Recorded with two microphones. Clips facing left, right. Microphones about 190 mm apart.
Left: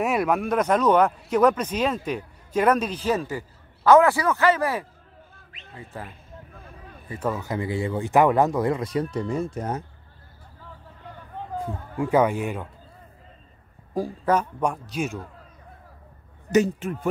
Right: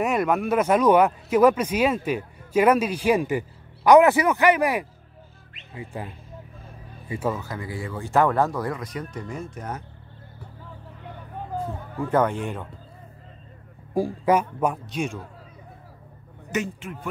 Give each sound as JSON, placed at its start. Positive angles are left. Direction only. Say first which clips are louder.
{"t": 0.0, "sound": "speech", "louder": "even", "side_deg": 0}
{"t": 5.9, "sound": "speech", "louder": "right 1 dB", "side_deg": -15}
{"t": 7.3, "sound": "speech", "louder": "left 5 dB", "side_deg": 20}
{"t": 12.0, "sound": "speech", "louder": "left 2 dB", "side_deg": 10}
{"t": 13.9, "sound": "a man's voice", "louder": "right 2 dB", "side_deg": -10}
{"t": 16.5, "sound": "speech", "louder": "left 8 dB", "side_deg": 40}